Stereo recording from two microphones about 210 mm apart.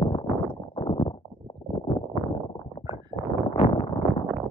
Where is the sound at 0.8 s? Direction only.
25° left (ahead or behind).